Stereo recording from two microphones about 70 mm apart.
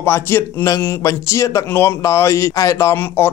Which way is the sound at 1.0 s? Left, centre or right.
Left.